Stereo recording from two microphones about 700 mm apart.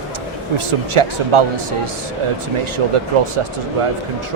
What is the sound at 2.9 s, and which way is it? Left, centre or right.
Speech, right.